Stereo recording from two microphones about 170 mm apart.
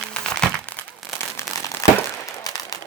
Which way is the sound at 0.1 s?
5° left (ahead or behind).